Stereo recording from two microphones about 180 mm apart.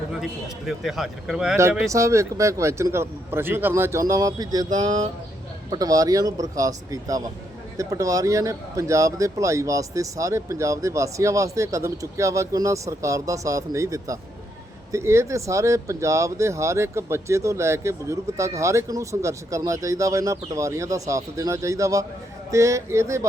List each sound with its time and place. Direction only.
0.1 s a man's voice: centre (ahead or behind)
1.9 s speech: 15° right (ahead or behind)